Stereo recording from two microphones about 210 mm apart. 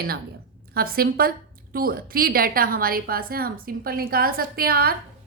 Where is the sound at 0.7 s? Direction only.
45° right (ahead or behind).